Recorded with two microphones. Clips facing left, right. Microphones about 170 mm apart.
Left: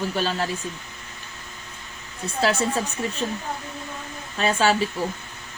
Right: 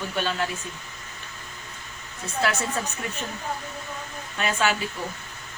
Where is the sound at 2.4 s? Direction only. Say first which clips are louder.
Left 4 dB; 30° left (ahead or behind).